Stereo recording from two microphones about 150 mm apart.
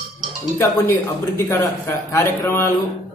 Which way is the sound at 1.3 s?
15° left (ahead or behind).